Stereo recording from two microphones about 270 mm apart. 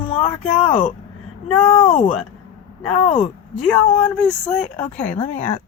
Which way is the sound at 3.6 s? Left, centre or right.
Centre.